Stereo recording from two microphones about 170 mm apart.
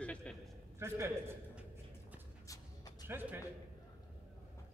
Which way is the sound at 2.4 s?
20° left (ahead or behind).